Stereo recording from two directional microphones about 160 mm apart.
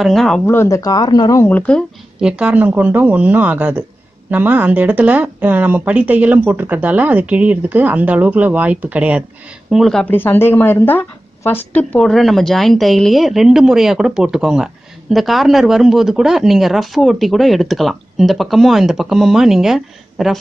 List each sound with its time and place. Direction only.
0.0 s speech: centre (ahead or behind)
0.5 s speech: 15° left (ahead or behind)
2.1 s speech: 5° right (ahead or behind)